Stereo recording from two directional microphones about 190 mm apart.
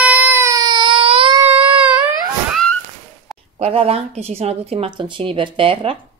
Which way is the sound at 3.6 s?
30° right (ahead or behind).